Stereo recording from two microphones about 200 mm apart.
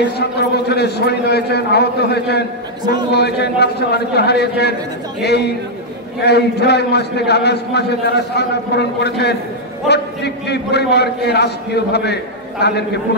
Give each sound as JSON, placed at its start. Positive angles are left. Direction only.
{"t": 0.2, "sound": "a man's voice", "side_deg": 55}